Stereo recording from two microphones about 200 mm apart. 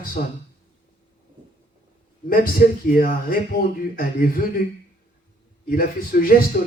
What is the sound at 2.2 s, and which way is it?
Speech, 45° left (ahead or behind).